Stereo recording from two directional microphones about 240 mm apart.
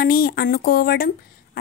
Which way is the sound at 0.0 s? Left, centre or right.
Left.